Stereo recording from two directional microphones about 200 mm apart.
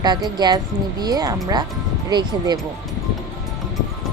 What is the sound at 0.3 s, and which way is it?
Speech, 20° right (ahead or behind).